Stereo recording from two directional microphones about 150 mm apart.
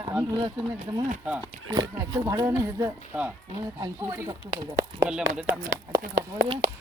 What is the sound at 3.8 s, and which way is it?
Speech, 25° right (ahead or behind).